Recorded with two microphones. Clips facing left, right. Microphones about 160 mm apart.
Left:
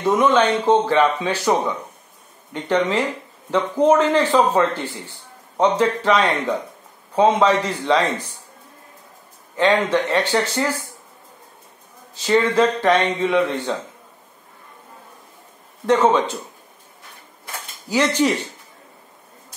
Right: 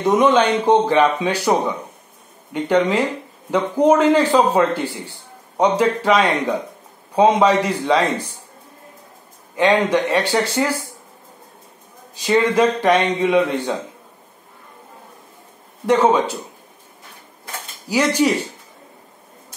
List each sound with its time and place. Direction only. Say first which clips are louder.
0.0 s speech: right 2 dB; 15° right (ahead or behind)
9.6 s speech: right 2 dB; 15° right (ahead or behind)
12.2 s speech: right 1 dB; 15° right (ahead or behind)
15.9 s speech: right 1 dB; 10° right (ahead or behind)
17.8 s speech: right 1 dB; 10° right (ahead or behind)